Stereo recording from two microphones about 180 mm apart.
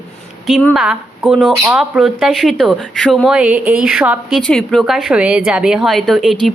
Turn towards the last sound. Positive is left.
turn(degrees=0)  # may be behind; listen again after turning